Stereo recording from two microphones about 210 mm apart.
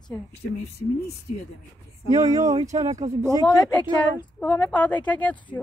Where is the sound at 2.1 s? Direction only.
15° right (ahead or behind).